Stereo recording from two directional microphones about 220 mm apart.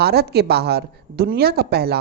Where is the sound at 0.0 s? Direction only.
45° right (ahead or behind).